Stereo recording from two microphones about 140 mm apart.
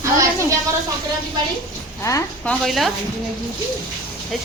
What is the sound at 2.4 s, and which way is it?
Speech, 5° left (ahead or behind).